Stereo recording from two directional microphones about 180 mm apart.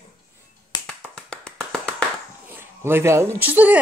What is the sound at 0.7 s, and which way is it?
Finger snapping, 25° left (ahead or behind).